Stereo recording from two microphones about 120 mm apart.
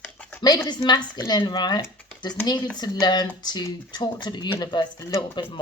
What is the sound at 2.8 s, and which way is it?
Speech, 35° left (ahead or behind).